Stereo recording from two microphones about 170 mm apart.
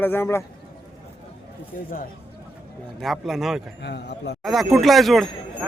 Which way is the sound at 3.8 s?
85° left.